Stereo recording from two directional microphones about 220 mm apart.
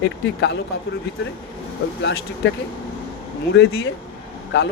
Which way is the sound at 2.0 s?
50° left (ahead or behind).